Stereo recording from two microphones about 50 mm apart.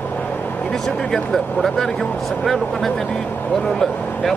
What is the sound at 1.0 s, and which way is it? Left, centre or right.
Speech, centre.